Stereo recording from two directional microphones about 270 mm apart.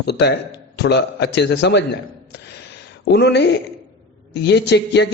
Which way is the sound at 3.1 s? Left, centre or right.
Left.